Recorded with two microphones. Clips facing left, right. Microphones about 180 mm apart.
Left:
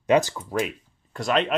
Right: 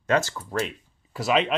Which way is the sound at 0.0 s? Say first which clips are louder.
Left 4 dB; 15° left (ahead or behind).